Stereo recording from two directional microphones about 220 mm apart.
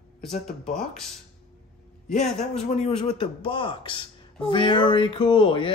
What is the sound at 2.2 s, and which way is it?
Speech, centre (ahead or behind).